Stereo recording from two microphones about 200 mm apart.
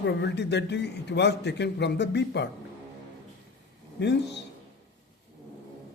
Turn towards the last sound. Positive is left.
turn(degrees=60)  # may be behind; listen again after turning